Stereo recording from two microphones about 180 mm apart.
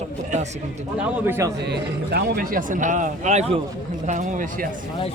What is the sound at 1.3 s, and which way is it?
Speech, 15° right (ahead or behind).